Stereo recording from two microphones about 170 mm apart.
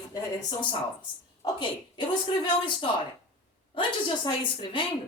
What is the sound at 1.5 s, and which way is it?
Speech, 30° left (ahead or behind).